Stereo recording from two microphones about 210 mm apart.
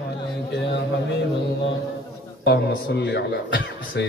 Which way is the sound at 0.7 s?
55° left (ahead or behind).